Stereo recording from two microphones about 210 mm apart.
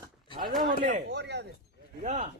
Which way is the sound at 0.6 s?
45° right (ahead or behind).